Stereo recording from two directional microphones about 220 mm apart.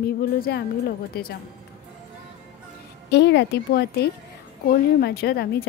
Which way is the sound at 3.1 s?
50° left (ahead or behind).